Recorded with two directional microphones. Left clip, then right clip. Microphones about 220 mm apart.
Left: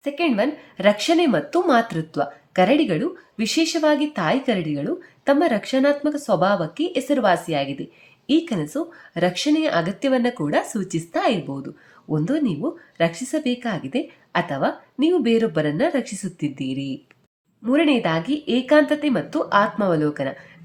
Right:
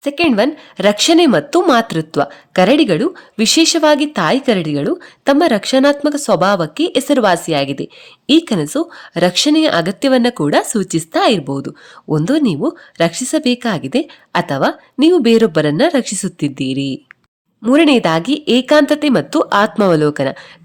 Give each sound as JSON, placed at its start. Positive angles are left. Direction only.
{"t": 0.0, "sound": "speech", "side_deg": -45}